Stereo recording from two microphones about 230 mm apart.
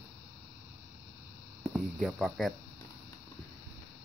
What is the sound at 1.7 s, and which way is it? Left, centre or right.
Speech, centre.